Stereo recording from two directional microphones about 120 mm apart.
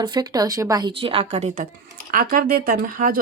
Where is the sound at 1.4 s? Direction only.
85° right.